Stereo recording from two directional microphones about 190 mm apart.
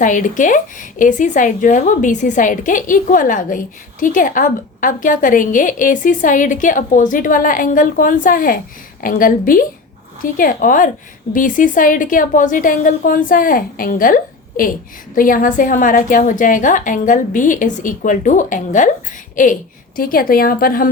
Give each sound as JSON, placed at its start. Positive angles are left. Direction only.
{"t": 0.0, "sound": "a woman's voice", "side_deg": 40}
{"t": 20.0, "sound": "a woman's voice", "side_deg": 50}